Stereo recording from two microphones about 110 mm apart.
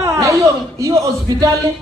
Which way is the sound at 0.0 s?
30° right (ahead or behind).